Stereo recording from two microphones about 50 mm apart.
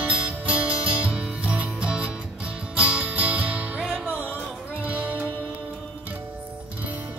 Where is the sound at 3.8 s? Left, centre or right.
Centre.